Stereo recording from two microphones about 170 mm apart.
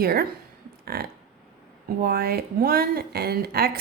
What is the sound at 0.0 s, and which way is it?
A woman's voice, 65° right (ahead or behind).